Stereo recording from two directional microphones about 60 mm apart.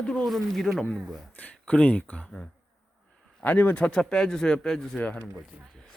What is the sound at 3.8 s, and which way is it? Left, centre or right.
Speech, centre.